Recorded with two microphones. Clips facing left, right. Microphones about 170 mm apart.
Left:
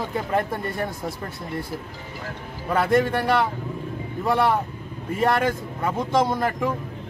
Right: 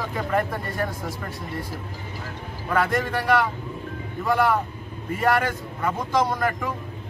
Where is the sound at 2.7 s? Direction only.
30° left (ahead or behind).